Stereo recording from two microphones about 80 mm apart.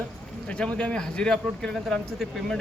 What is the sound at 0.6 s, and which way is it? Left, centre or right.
A man's voice, centre.